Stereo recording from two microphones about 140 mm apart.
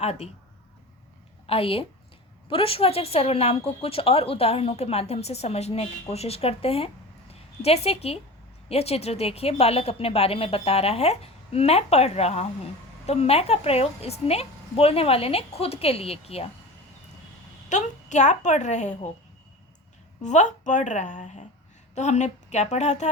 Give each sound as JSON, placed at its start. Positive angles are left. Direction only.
{"t": 0.0, "sound": "a woman's voice", "side_deg": 45}
{"t": 1.5, "sound": "a woman's voice", "side_deg": 40}
{"t": 17.7, "sound": "a woman's voice", "side_deg": 60}
{"t": 20.2, "sound": "a woman's voice", "side_deg": 60}